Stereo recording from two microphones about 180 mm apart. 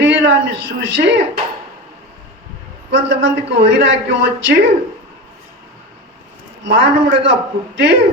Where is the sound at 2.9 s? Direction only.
90° right.